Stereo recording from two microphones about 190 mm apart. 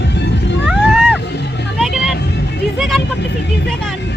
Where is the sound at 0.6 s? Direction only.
Centre (ahead or behind).